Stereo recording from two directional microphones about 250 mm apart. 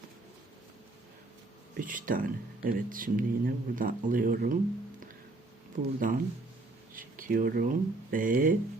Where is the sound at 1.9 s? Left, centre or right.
Right.